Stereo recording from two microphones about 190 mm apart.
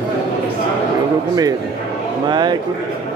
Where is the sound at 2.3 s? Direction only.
20° right (ahead or behind).